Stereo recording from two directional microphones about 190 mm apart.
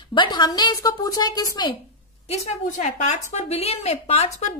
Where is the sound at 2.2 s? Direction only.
35° left (ahead or behind).